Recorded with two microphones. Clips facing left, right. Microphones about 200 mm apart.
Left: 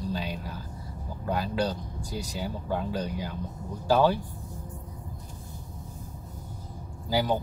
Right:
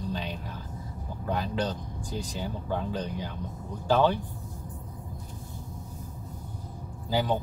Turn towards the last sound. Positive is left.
turn(degrees=10)  # may be behind; listen again after turning